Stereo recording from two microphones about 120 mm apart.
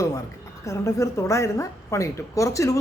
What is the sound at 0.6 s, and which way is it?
Speech, 25° left (ahead or behind).